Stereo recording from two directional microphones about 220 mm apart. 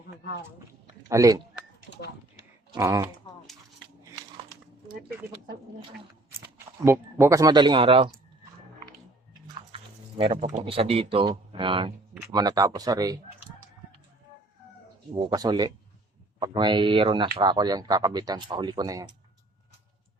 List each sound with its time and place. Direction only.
1.0 s speech: 15° right (ahead or behind)
2.7 s speech: 15° right (ahead or behind)
6.8 s speech: 10° right (ahead or behind)
9.7 s speech: 25° right (ahead or behind)
15.1 s speech: 20° right (ahead or behind)